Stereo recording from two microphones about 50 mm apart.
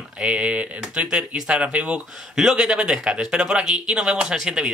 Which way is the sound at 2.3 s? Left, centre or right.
Centre.